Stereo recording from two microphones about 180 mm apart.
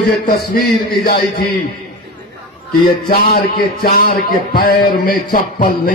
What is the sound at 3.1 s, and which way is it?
A man's voice, 60° left (ahead or behind).